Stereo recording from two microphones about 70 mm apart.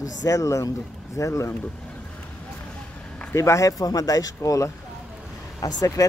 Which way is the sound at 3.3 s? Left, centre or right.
Left.